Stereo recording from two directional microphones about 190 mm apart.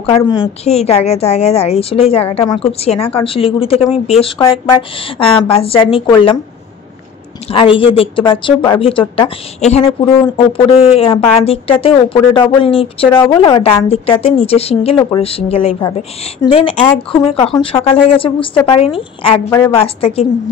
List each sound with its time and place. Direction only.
0.0 s a woman's voice: 30° left (ahead or behind)
7.5 s speech: 25° left (ahead or behind)
10.0 s a woman's voice: 20° left (ahead or behind)
16.4 s speech: 15° left (ahead or behind)
17.1 s a woman's voice: 30° left (ahead or behind)